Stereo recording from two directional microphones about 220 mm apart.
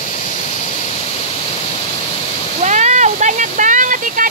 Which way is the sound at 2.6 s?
35° right (ahead or behind).